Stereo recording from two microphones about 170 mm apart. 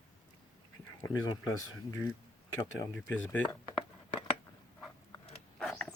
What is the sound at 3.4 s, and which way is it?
Speech, 25° left (ahead or behind).